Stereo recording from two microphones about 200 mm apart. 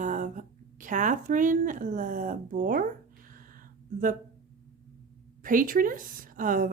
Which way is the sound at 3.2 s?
45° right (ahead or behind).